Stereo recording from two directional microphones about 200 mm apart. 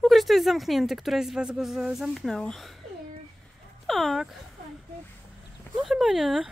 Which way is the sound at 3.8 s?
Centre (ahead or behind).